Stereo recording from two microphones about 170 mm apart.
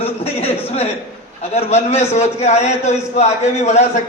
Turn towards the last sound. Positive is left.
turn(degrees=40)  # may be behind; listen again after turning